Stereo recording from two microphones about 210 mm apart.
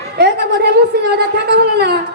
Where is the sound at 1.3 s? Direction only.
50° right (ahead or behind).